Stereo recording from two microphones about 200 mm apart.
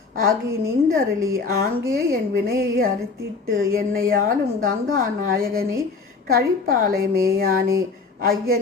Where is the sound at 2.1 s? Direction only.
50° right (ahead or behind).